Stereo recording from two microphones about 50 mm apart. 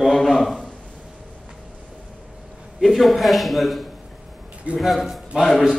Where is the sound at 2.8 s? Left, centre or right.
Centre.